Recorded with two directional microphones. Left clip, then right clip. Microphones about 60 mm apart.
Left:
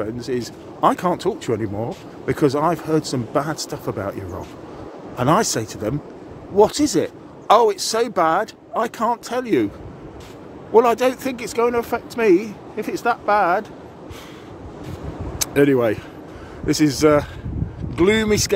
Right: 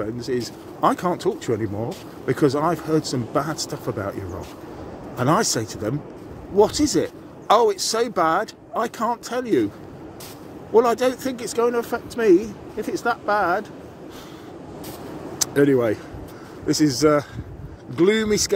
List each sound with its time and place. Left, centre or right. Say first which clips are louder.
0.0 s speech: left 1 dB; left
2.2 s speech: left 2 dB; left
9.3 s speech: left 2 dB; left
10.7 s speech: left 3 dB; left
15.3 s speech: left 2 dB; left
16.6 s speech: left 2 dB; left